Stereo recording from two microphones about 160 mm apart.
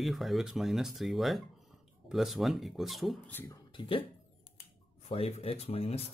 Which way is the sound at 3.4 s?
30° left (ahead or behind).